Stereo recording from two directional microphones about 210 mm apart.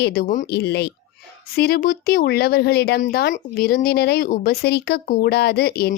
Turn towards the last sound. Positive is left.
turn(degrees=45)  # may be behind; listen again after turning